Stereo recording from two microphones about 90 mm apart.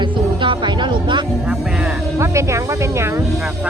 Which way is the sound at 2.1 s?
35° right (ahead or behind).